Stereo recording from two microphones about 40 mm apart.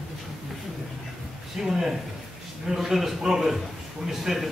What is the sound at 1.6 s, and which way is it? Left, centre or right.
Speech, centre.